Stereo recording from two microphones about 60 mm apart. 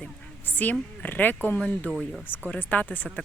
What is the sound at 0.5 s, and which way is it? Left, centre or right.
Speech, left.